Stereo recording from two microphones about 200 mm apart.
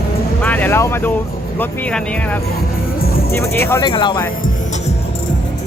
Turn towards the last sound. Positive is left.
turn(degrees=25)  # may be behind; listen again after turning